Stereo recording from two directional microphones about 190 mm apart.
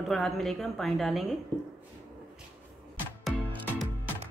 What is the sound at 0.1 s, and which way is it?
Speech, centre (ahead or behind).